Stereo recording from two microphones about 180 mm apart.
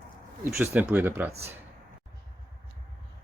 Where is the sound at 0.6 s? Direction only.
10° right (ahead or behind).